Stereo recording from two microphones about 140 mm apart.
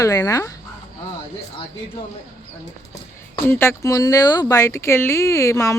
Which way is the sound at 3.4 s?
15° left (ahead or behind).